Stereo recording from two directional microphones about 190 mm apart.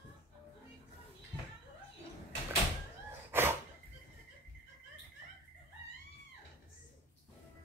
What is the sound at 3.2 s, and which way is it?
Sneeze, 10° right (ahead or behind).